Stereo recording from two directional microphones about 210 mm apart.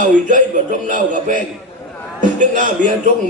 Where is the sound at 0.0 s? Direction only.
35° right (ahead or behind).